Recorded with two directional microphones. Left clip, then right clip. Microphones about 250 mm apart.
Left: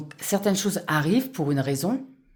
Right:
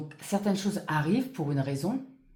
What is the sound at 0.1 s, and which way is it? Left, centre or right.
Mantra, left.